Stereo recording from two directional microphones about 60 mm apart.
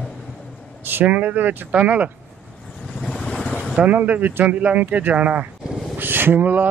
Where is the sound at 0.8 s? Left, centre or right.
Right.